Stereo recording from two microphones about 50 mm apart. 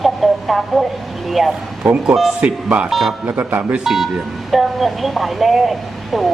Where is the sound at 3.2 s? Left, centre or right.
Right.